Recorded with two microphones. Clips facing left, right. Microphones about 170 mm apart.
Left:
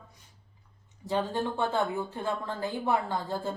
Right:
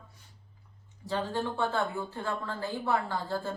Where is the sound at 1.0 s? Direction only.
15° left (ahead or behind).